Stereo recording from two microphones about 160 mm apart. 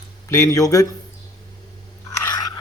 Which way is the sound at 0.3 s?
20° left (ahead or behind).